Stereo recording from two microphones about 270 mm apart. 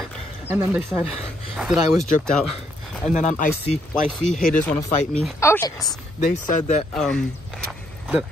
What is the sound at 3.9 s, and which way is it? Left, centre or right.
Speech, centre.